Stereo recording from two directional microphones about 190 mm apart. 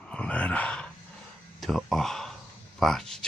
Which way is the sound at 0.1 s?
5° left (ahead or behind).